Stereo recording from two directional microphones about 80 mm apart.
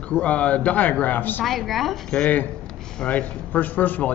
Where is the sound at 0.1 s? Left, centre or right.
Centre.